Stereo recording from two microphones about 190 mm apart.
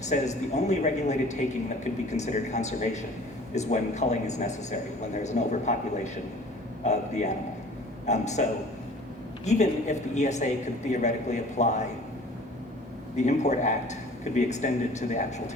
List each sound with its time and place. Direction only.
0.0 s a man's voice: 35° left (ahead or behind)
6.8 s a man's voice: 35° left (ahead or behind)
13.1 s a man's voice: 35° left (ahead or behind)